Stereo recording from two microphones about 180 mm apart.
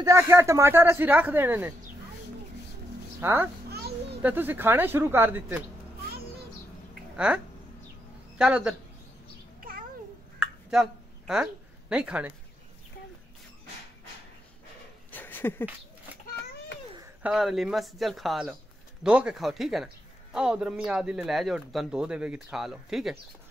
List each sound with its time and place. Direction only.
0.0 s speech: 15° right (ahead or behind)
3.2 s speech: 15° right (ahead or behind)
3.7 s a sound: 60° right (ahead or behind)
4.2 s speech: 10° right (ahead or behind)
7.2 s a man's voice: 5° right (ahead or behind)
10.4 s a sound: 5° right (ahead or behind)
11.9 s speech: 5° right (ahead or behind)
15.0 s a sound: 10° left (ahead or behind)
17.2 s a man's voice: 5° right (ahead or behind)